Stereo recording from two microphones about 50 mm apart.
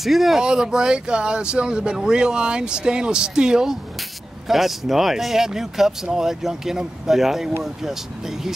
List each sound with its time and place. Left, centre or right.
0.0 s speech: centre
0.4 s speech: centre